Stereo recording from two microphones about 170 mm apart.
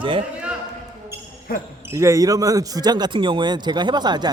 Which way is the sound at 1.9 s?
15° right (ahead or behind).